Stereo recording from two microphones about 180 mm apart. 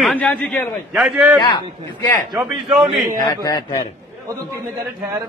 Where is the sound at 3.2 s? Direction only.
20° left (ahead or behind).